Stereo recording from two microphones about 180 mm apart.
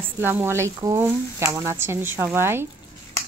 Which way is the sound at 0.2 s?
10° right (ahead or behind).